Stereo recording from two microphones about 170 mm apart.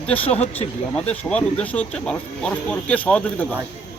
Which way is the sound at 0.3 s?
35° left (ahead or behind).